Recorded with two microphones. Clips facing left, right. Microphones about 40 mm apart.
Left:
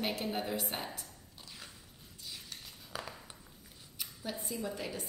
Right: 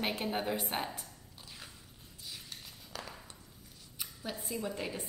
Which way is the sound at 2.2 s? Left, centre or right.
Centre.